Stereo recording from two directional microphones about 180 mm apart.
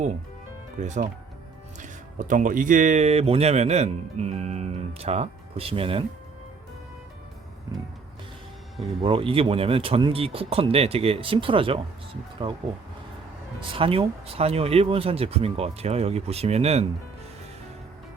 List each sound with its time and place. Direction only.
0.8 s speech: 40° right (ahead or behind)
9.0 s speech: 30° right (ahead or behind)